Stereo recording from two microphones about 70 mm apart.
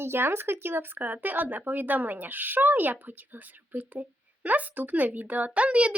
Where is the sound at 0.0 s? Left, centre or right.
Right.